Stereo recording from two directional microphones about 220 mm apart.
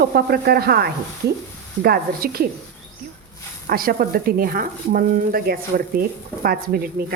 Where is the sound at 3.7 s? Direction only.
40° right (ahead or behind).